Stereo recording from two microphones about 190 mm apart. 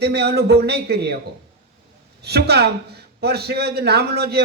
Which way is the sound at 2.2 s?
60° right (ahead or behind).